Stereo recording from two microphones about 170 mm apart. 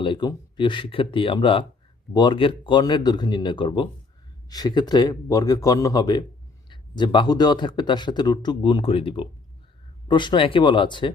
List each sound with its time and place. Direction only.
0.0 s speech: 25° left (ahead or behind)